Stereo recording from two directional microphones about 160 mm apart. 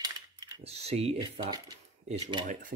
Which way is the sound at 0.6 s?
40° right (ahead or behind).